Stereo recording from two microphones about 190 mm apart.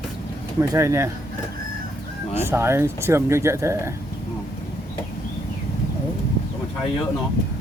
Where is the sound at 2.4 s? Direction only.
15° right (ahead or behind).